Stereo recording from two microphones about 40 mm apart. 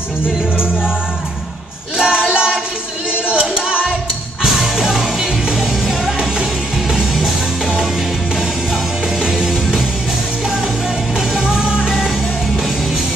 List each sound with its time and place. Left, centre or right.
2.0 s music: right
3.3 s singing: right
4.4 s music: centre
9.2 s music: centre